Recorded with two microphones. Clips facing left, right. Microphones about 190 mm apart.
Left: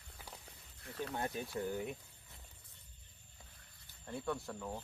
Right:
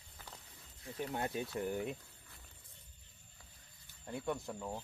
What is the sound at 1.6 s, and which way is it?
Speech, 20° right (ahead or behind).